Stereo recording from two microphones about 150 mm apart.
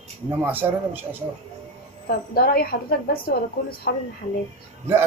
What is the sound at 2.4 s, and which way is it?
A woman's voice, 85° left.